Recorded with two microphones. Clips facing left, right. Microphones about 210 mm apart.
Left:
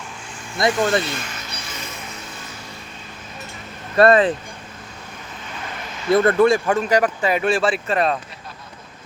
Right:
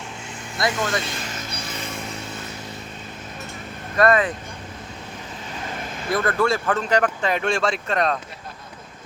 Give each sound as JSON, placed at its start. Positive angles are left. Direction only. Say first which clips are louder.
{"t": 0.6, "sound": "speech", "louder": "left 5 dB", "side_deg": 30}
{"t": 1.2, "sound": "music", "louder": "right 2 dB", "side_deg": -40}
{"t": 3.9, "sound": "speech", "louder": "left 4 dB", "side_deg": 30}
{"t": 5.8, "sound": "vehicle", "louder": "right 2 dB", "side_deg": -50}
{"t": 6.1, "sound": "speech", "louder": "left 7 dB", "side_deg": 25}